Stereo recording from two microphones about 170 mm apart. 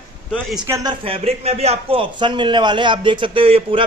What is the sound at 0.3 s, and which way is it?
Speech, centre (ahead or behind).